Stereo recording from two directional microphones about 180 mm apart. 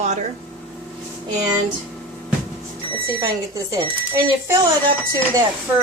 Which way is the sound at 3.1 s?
20° right (ahead or behind).